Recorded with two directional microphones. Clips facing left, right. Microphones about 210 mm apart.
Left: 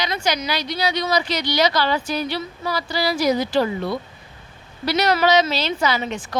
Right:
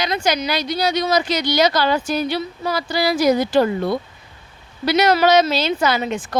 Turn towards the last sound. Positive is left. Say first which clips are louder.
# right 3 dB
turn(degrees=-50)  # may be behind; listen again after turning